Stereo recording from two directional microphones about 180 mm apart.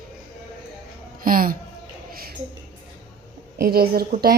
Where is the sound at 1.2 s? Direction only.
50° right (ahead or behind).